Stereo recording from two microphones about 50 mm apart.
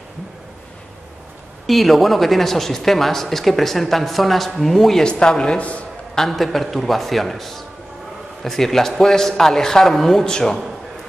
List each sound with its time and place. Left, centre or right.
1.7 s speech: centre
5.0 s speech: centre
6.1 s a man's voice: centre